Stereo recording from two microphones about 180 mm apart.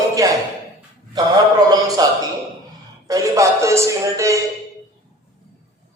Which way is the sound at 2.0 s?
20° right (ahead or behind).